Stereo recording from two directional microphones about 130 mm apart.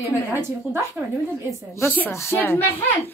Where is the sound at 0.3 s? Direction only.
20° right (ahead or behind).